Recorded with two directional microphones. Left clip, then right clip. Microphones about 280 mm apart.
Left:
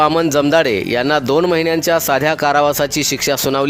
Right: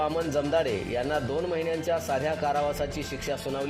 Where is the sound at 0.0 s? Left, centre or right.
Left.